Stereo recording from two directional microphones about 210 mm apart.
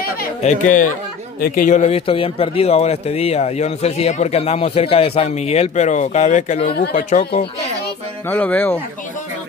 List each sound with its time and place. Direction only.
0.4 s a man's voice: 35° left (ahead or behind)
6.7 s speech: 45° left (ahead or behind)
8.3 s speech: 10° left (ahead or behind)